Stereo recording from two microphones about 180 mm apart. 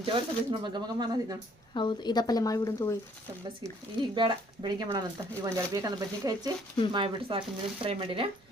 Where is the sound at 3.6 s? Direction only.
25° right (ahead or behind).